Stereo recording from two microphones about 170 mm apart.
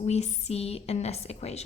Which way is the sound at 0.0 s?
40° left (ahead or behind).